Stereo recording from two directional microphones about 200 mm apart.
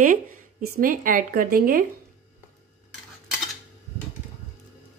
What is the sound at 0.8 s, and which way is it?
A woman's voice, 45° right (ahead or behind).